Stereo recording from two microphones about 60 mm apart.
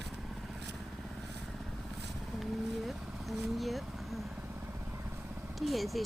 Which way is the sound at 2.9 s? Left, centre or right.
Centre.